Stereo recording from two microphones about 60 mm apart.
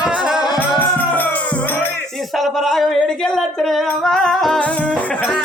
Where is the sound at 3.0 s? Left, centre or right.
Centre.